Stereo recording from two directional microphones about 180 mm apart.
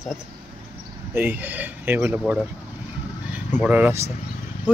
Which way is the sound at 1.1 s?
10° right (ahead or behind).